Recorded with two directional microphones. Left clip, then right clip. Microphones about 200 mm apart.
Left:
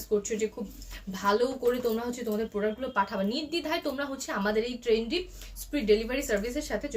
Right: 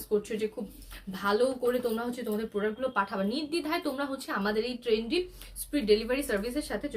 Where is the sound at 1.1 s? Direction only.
15° right (ahead or behind).